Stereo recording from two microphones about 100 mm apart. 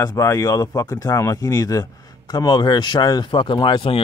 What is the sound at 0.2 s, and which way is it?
Speech, 30° left (ahead or behind).